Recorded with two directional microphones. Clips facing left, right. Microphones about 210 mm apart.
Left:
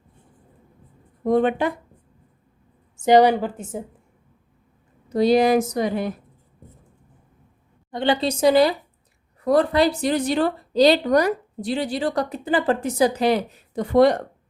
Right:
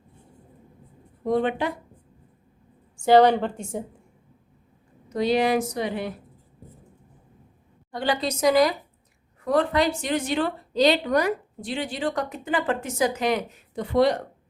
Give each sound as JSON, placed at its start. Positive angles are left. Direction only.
{"t": 1.2, "sound": "speech", "side_deg": 50}
{"t": 3.0, "sound": "a woman's voice", "side_deg": 15}
{"t": 5.0, "sound": "a woman's voice", "side_deg": 35}
{"t": 7.9, "sound": "a woman's voice", "side_deg": 25}
{"t": 13.9, "sound": "speech", "side_deg": 50}